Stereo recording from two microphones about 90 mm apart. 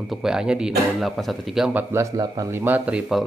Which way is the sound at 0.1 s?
5° right (ahead or behind).